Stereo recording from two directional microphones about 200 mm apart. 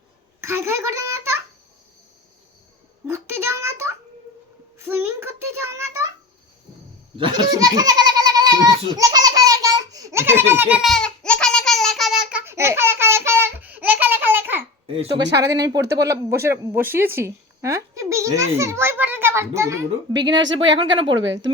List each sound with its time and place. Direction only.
0.4 s a child's voice: 15° right (ahead or behind)
3.1 s a sound: 15° right (ahead or behind)
4.8 s a child's voice: 10° right (ahead or behind)
7.2 s a sound: 20° right (ahead or behind); by 12.4 s centre (ahead or behind)
12.5 s a sound: 10° right (ahead or behind)
14.8 s speech: 25° right (ahead or behind)
15.2 s speech: 60° right (ahead or behind)
15.4 s speech: 20° right (ahead or behind)
20.4 s speech: 65° right (ahead or behind)
20.7 s speech: 25° right (ahead or behind)